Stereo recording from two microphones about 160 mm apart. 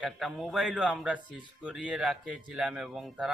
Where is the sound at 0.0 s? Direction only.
Centre (ahead or behind).